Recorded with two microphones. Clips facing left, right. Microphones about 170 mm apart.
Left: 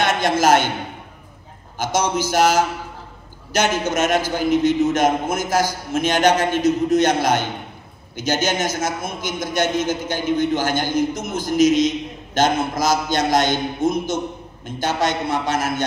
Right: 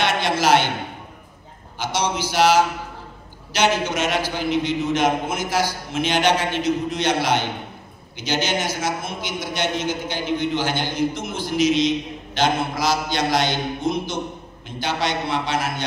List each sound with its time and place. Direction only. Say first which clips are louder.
0.0 s a man's voice: left 3 dB; 45° left (ahead or behind)
1.8 s a man's voice: left 3 dB; 45° left (ahead or behind)